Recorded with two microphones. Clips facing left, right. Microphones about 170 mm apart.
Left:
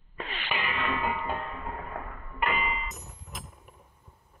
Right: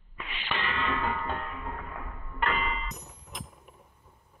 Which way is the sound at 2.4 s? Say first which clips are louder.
Even; 10° left (ahead or behind).